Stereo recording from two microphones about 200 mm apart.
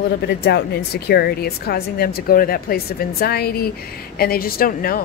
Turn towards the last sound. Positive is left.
turn(degrees=45)  # may be behind; listen again after turning